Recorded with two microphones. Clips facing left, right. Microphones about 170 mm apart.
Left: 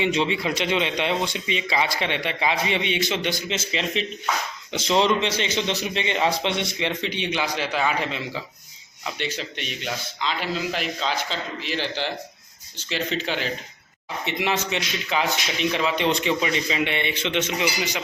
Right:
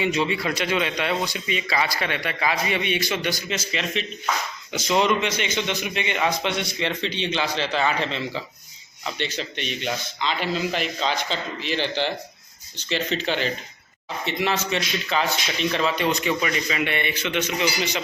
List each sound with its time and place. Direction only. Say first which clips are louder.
0.0 s a man's voice: left 1 dB; 25° left (ahead or behind); by 13.5 s 5° left (ahead or behind)
14.3 s a man's voice: right 1 dB; 15° left (ahead or behind)
16.0 s a man's voice: left 1 dB; 25° left (ahead or behind)